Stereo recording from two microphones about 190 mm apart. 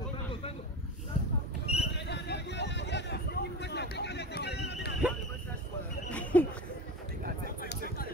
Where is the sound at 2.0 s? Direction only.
65° left (ahead or behind).